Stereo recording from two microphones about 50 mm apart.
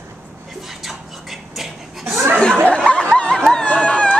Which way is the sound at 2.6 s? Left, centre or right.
Left.